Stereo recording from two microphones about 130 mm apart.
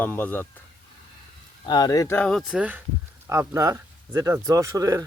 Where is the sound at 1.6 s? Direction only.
30° left (ahead or behind).